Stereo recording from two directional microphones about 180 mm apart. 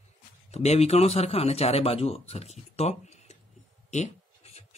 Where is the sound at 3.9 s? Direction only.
40° left (ahead or behind).